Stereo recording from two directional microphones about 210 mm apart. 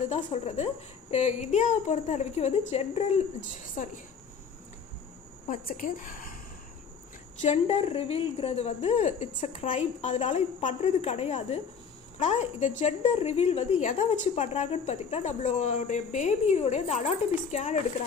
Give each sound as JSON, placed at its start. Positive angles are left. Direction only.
{"t": 0.1, "sound": "a woman's voice", "side_deg": 35}
{"t": 5.5, "sound": "a woman's voice", "side_deg": 40}
{"t": 7.4, "sound": "a woman's voice", "side_deg": 30}